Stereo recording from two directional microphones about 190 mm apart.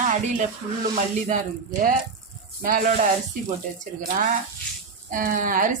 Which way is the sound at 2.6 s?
45° right (ahead or behind).